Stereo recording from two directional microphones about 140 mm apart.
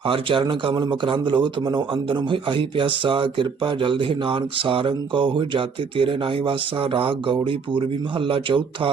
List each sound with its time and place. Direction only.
0.0 s speech: 40° right (ahead or behind)